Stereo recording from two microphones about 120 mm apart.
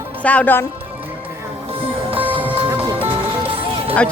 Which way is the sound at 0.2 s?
10° left (ahead or behind).